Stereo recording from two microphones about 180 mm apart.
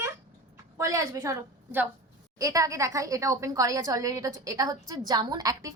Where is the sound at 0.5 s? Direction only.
20° right (ahead or behind).